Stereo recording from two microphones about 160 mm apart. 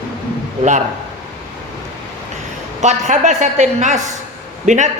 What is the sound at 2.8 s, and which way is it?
A woman's voice, 45° right (ahead or behind).